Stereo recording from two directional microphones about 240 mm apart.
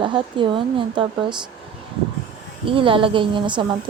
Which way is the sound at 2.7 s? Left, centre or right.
Right.